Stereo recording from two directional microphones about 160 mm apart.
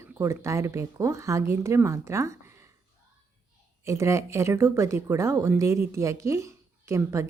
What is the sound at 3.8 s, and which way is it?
A woman's voice, 20° right (ahead or behind).